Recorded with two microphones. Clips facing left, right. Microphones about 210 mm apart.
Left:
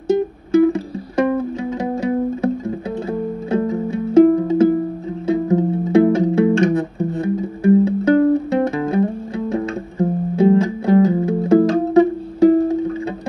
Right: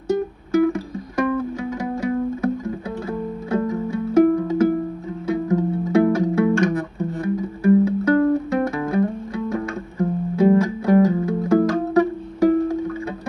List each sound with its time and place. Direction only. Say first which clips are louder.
0.5 s music: left 4 dB; 25° left (ahead or behind)